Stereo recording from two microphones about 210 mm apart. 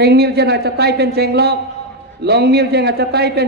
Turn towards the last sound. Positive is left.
turn(degrees=-50)  # may be behind; listen again after turning